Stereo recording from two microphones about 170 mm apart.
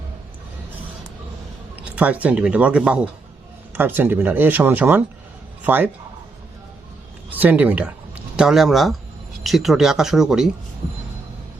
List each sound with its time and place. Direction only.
1.8 s speech: 10° right (ahead or behind)
7.3 s speech: 10° right (ahead or behind)